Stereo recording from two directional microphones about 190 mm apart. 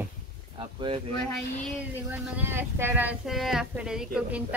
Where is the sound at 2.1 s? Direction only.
10° right (ahead or behind).